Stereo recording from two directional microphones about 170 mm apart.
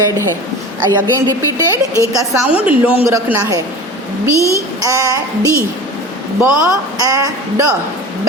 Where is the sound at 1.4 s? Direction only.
20° right (ahead or behind).